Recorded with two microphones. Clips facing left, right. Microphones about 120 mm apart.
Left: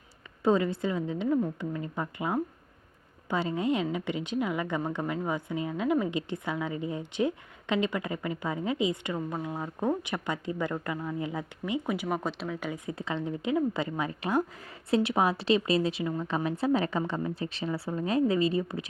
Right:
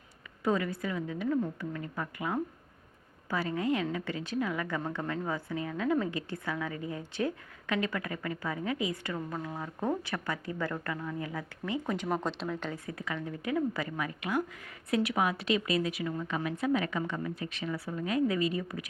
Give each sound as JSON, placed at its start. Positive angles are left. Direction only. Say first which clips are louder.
{"t": 0.4, "sound": "a woman's voice", "louder": "left 5 dB", "side_deg": 25}